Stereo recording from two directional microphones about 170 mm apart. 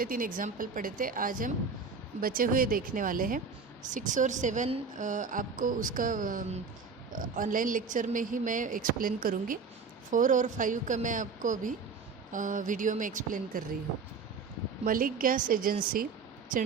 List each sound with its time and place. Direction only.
0.0 s a woman's voice: 55° right (ahead or behind)
14.8 s speech: 55° right (ahead or behind)